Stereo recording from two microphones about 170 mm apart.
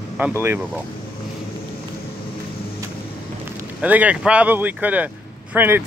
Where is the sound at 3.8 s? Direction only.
10° right (ahead or behind).